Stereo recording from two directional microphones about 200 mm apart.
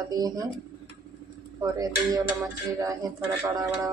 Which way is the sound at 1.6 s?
20° right (ahead or behind).